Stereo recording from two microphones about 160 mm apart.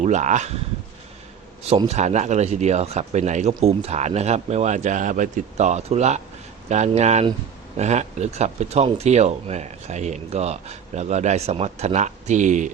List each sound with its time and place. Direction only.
0.0 s speech: 50° right (ahead or behind)
1.9 s speech: 45° right (ahead or behind)